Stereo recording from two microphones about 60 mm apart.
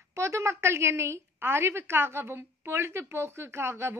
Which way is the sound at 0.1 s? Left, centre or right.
Right.